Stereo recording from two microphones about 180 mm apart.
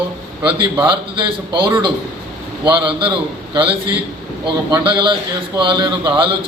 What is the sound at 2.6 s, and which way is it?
A man's voice, 25° right (ahead or behind).